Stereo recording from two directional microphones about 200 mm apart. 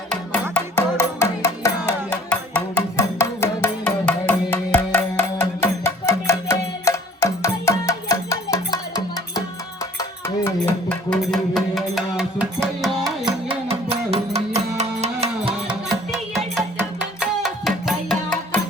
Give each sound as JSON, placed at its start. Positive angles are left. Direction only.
{"t": 0.1, "sound": "music", "side_deg": 10}
{"t": 13.2, "sound": "music", "side_deg": -25}
{"t": 15.9, "sound": "music", "side_deg": 0}